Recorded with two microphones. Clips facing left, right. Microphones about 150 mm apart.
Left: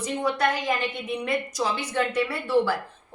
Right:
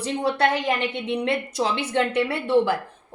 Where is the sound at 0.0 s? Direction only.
30° right (ahead or behind).